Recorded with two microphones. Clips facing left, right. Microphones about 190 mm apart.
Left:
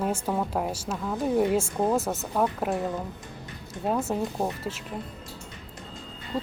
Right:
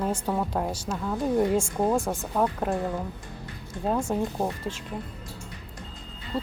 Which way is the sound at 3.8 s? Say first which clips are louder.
Right 1 dB; 5° left (ahead or behind).